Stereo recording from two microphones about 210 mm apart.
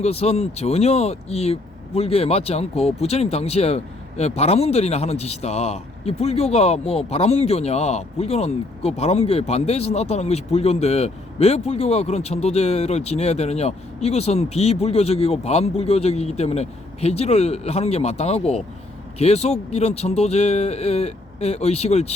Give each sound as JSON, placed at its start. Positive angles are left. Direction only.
{"t": 0.0, "sound": "a man's voice", "side_deg": 30}